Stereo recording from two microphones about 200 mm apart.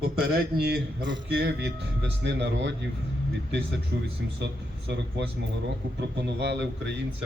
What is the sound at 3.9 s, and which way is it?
A man's voice, 55° right (ahead or behind).